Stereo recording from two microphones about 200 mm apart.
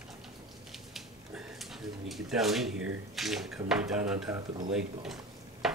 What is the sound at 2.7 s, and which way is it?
Speech, 90° right.